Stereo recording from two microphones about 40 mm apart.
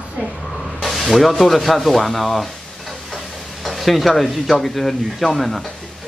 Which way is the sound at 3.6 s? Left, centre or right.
Centre.